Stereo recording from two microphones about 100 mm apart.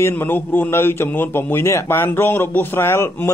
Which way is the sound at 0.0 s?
20° left (ahead or behind).